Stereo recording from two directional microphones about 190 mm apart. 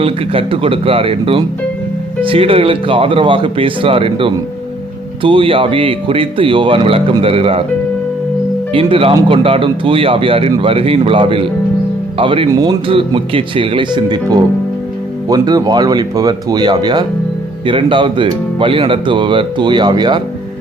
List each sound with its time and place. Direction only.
0.0 s speech: 30° right (ahead or behind)
8.7 s speech: 30° right (ahead or behind)